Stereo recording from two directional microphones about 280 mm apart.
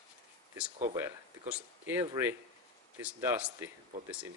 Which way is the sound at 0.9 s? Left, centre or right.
Centre.